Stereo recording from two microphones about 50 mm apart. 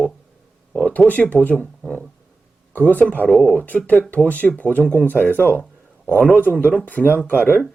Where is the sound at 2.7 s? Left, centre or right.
Left.